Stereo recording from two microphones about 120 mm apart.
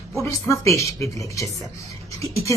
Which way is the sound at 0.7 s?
25° left (ahead or behind).